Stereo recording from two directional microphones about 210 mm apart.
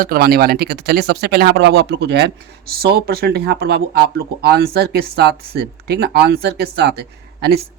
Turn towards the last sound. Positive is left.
turn(degrees=-50)  # may be behind; listen again after turning